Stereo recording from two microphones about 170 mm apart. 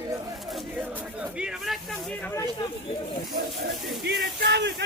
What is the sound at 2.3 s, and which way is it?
Speech, 20° left (ahead or behind).